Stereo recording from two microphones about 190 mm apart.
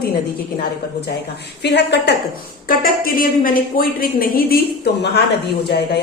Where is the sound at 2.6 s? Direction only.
50° left (ahead or behind).